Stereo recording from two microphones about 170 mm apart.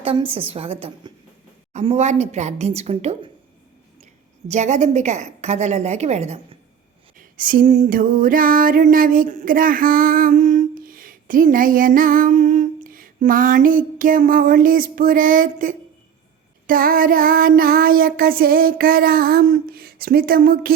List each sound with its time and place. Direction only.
0.0 s a woman's voice: 35° right (ahead or behind)
4.4 s a woman's voice: 45° right (ahead or behind)
7.2 s a sound: 55° right (ahead or behind)
16.6 s child singing: 55° right (ahead or behind)